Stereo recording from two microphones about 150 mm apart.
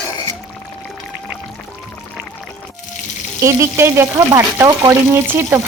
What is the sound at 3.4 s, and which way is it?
Speech, 20° right (ahead or behind).